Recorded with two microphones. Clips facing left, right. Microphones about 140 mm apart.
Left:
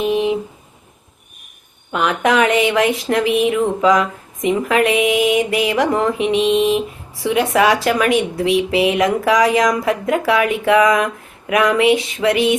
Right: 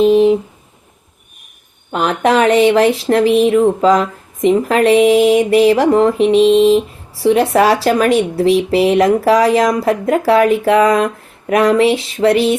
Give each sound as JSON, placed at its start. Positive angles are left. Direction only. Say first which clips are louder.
{"t": 0.0, "sound": "speech", "louder": "right 8 dB", "side_deg": -35}
{"t": 1.9, "sound": "speech", "louder": "right 3 dB", "side_deg": -35}